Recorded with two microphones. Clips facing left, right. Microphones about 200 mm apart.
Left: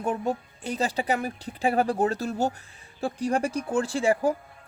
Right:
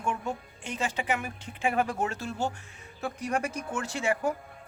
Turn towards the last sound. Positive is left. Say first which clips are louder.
# left 6 dB
turn(degrees=35)  # may be behind; listen again after turning